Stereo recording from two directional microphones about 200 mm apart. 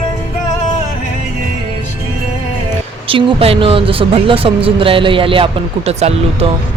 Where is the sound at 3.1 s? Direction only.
25° right (ahead or behind).